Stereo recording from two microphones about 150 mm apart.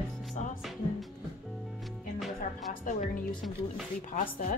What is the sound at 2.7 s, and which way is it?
Speech, 60° left (ahead or behind).